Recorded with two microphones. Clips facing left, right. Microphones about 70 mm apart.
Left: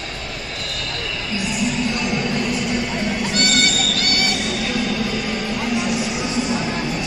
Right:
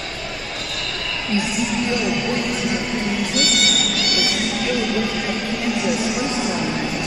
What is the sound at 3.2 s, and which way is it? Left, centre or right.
Music, left.